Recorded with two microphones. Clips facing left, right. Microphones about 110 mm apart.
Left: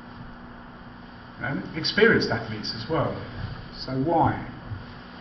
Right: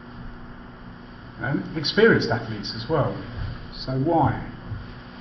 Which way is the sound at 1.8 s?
15° right (ahead or behind).